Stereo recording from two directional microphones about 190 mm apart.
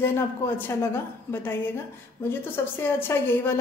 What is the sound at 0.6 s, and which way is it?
Speech, 10° left (ahead or behind).